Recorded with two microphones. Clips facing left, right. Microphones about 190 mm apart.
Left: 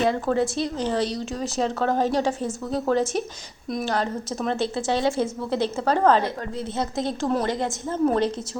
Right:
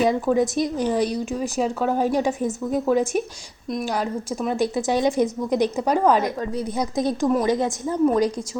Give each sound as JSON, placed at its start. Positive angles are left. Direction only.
{"t": 0.0, "sound": "speech", "side_deg": -15}
{"t": 3.7, "sound": "speech", "side_deg": 0}
{"t": 3.9, "sound": "speech", "side_deg": -10}
{"t": 7.0, "sound": "a woman's voice", "side_deg": 20}
{"t": 7.3, "sound": "a woman's voice", "side_deg": -20}